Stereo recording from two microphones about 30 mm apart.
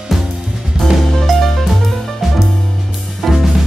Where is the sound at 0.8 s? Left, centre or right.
Left.